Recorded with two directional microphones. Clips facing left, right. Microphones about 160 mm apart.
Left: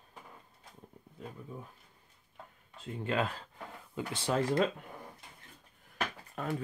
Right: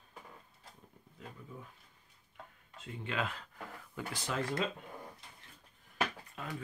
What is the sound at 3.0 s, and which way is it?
Speech, 40° left (ahead or behind).